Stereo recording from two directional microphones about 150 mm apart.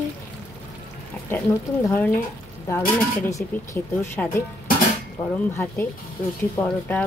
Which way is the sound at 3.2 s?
20° left (ahead or behind).